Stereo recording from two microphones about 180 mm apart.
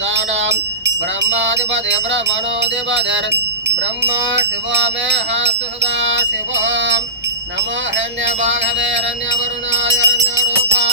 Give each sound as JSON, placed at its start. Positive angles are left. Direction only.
{"t": 0.0, "sound": "wind chime", "side_deg": -85}
{"t": 1.2, "sound": "music", "side_deg": -85}
{"t": 3.8, "sound": "music", "side_deg": -75}